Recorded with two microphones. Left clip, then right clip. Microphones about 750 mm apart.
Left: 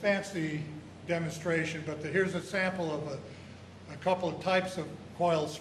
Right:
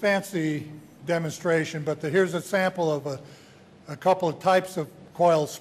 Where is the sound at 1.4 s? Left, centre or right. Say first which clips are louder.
Right 8 dB; right.